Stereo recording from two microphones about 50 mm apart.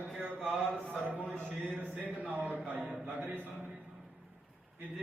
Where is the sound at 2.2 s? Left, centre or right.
Right.